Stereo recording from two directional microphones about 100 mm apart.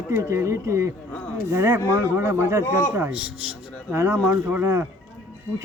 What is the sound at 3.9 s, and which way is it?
Speech, 25° right (ahead or behind).